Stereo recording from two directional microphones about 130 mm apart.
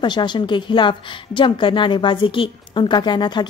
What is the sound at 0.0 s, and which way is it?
A woman's voice, 35° left (ahead or behind).